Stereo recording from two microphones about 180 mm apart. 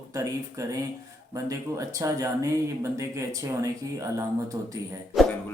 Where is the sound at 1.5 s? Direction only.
20° right (ahead or behind).